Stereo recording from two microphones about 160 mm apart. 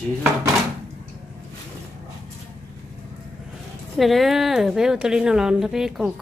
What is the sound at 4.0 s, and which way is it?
A woman's voice, centre (ahead or behind).